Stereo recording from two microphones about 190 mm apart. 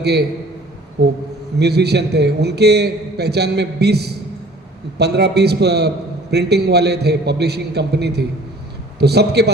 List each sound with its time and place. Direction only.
0.0 s a man's voice: 60° right (ahead or behind)